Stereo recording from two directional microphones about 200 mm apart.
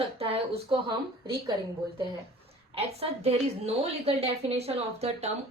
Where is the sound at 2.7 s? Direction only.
30° right (ahead or behind).